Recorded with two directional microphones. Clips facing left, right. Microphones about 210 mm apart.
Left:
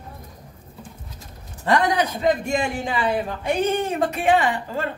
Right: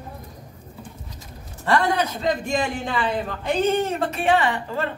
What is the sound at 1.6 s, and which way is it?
Speech, 15° left (ahead or behind).